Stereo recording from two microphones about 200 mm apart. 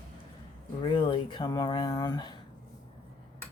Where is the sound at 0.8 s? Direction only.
25° left (ahead or behind).